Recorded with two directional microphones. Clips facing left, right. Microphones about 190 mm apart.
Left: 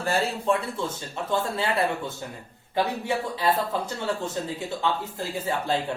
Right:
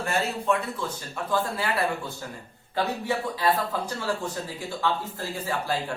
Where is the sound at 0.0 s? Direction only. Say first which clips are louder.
Left 2 dB; 30° left (ahead or behind).